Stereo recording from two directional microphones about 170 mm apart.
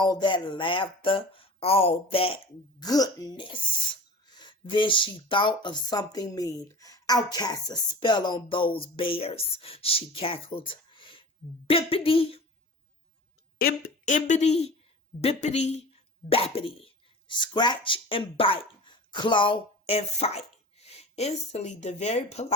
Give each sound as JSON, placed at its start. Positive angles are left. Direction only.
{"t": 0.0, "sound": "speech", "side_deg": 25}
{"t": 2.8, "sound": "speech", "side_deg": 20}
{"t": 13.6, "sound": "speech", "side_deg": 65}
{"t": 14.0, "sound": "speech", "side_deg": 45}